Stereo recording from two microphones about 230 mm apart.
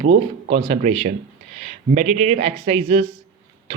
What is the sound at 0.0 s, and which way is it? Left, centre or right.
Speech, right.